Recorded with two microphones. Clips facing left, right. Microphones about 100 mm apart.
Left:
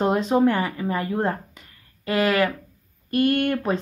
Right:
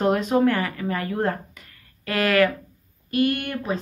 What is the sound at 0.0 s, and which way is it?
Speech, 25° left (ahead or behind).